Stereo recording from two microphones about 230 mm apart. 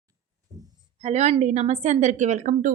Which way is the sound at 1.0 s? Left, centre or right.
Right.